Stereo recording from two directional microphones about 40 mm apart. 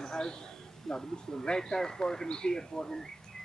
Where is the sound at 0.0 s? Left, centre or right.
Centre.